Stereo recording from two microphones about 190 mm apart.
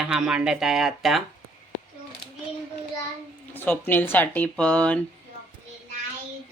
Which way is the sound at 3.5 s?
10° left (ahead or behind).